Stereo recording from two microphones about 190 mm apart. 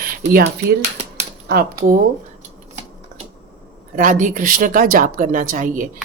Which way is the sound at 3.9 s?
45° right (ahead or behind).